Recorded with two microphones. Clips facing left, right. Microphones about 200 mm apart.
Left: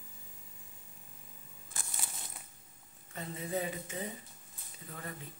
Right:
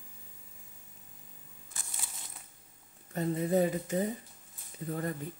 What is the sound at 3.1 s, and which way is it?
Speech, 45° right (ahead or behind).